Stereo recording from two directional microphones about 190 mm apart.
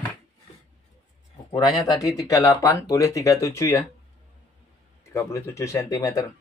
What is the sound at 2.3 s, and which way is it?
Speech, 15° left (ahead or behind).